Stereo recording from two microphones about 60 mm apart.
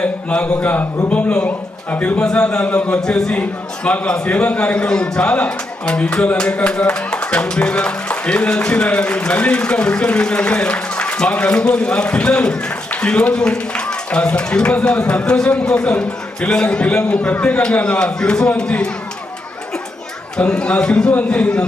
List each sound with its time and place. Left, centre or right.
0.0 s a man's voice: left
3.0 s a man's voice: centre
20.4 s a man's voice: centre
21.1 s a man's voice: left
21.3 s a man's voice: centre